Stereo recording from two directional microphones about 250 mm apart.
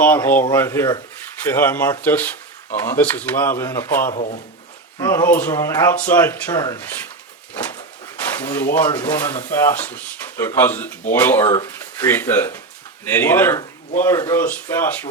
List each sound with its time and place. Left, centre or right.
0.0 s speech: centre
4.1 s speech: left
4.9 s speech: centre
8.4 s speech: centre